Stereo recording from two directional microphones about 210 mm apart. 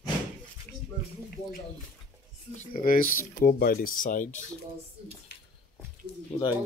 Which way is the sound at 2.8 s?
40° left (ahead or behind).